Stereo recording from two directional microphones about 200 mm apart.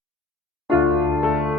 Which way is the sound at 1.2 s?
Centre (ahead or behind).